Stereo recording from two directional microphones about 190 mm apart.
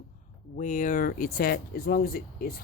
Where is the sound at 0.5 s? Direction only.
40° left (ahead or behind).